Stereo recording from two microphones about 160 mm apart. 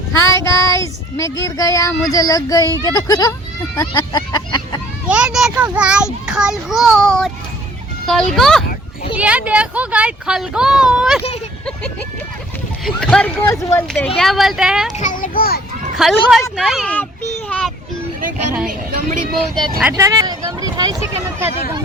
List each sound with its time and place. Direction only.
0.1 s child singing: 20° left (ahead or behind)
3.8 s speech: 25° left (ahead or behind)
5.0 s a sound: 5° right (ahead or behind)
5.7 s a child's voice: 5° right (ahead or behind)
9.1 s speech: 10° right (ahead or behind)
12.8 s a child's voice: 5° left (ahead or behind)
13.5 s a child's voice: 15° left (ahead or behind); by 14.8 s 5° right (ahead or behind)
14.9 s a child's voice: 55° left (ahead or behind); by 15.6 s 70° left (ahead or behind)
16.0 s a child's voice: centre (ahead or behind)
17.3 s children playing: 5° left (ahead or behind)
18.7 s a woman's voice: 60° right (ahead or behind)
19.9 s speech: 20° right (ahead or behind)